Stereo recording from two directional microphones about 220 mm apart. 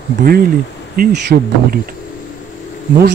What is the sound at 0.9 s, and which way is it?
Speech, 45° right (ahead or behind).